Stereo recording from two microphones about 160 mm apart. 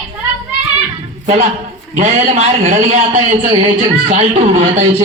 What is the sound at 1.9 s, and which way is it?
A man's voice, 45° right (ahead or behind).